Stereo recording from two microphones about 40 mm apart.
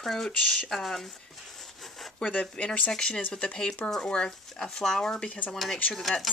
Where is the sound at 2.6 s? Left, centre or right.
Left.